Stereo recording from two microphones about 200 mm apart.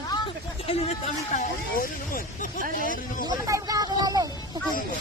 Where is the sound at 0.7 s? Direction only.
35° left (ahead or behind).